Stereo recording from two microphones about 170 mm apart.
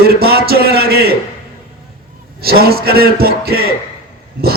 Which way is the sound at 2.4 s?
65° right (ahead or behind).